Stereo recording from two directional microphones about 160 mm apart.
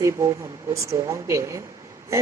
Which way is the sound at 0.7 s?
20° right (ahead or behind).